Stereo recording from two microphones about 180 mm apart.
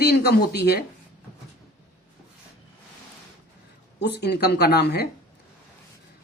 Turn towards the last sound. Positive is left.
turn(degrees=65)  # may be behind; listen again after turning